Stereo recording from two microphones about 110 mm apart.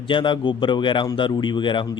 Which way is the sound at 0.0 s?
50° left (ahead or behind).